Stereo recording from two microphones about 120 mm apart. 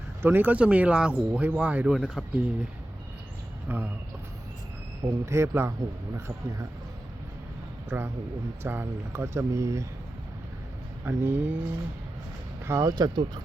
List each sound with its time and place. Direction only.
0.2 s speech: 20° right (ahead or behind)
3.7 s speech: 15° right (ahead or behind)
5.0 s speech: 25° right (ahead or behind)
7.9 s a man's voice: 20° right (ahead or behind)
11.0 s speech: 15° right (ahead or behind)
12.6 s speech: 25° right (ahead or behind)